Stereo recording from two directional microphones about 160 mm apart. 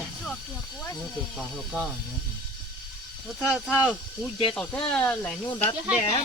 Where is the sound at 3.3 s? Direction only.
5° right (ahead or behind).